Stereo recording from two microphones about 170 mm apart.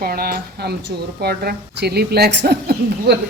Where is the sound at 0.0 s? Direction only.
60° right (ahead or behind).